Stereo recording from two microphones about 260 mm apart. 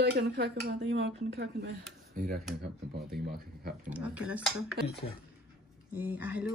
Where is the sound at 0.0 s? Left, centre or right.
Right.